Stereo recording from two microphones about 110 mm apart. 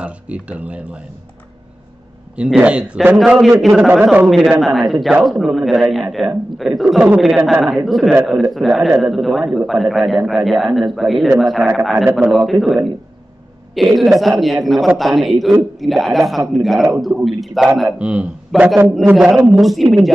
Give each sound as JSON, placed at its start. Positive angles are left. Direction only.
{"t": 0.0, "sound": "a man's voice", "side_deg": -10}
{"t": 2.3, "sound": "a man's voice", "side_deg": -10}
{"t": 4.3, "sound": "a man's voice", "side_deg": 0}